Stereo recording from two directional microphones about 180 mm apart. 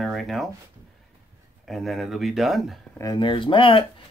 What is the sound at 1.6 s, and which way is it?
Speech, centre (ahead or behind).